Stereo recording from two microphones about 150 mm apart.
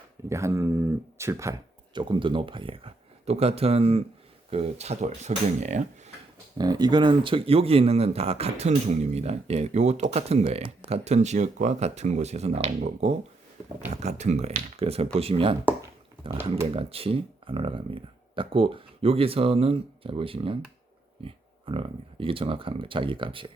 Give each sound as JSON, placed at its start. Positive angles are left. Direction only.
{"t": 0.3, "sound": "speech", "side_deg": -20}
{"t": 1.9, "sound": "speech", "side_deg": -30}
{"t": 6.6, "sound": "speech", "side_deg": -25}
{"t": 16.6, "sound": "speech", "side_deg": -40}